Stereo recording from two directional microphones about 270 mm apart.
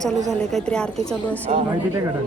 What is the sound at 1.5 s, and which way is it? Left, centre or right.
Speech, right.